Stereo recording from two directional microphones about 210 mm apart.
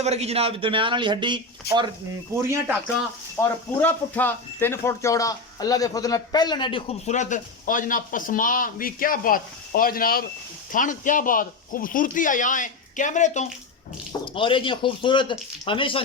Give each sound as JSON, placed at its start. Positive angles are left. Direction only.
{"t": 0.0, "sound": "speech", "side_deg": -30}
{"t": 3.4, "sound": "speech", "side_deg": 10}
{"t": 14.3, "sound": "speech", "side_deg": 25}